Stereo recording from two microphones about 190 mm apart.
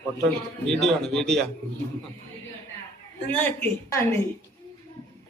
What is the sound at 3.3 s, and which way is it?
Speech, 10° left (ahead or behind).